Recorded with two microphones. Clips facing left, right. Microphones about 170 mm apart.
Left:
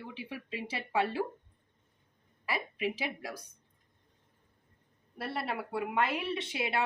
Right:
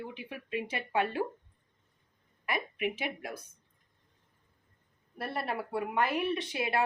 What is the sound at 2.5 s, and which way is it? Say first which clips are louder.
Speech: right 1 dB; 30° left (ahead or behind).